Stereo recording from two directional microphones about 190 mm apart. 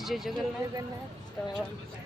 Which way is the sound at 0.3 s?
20° right (ahead or behind).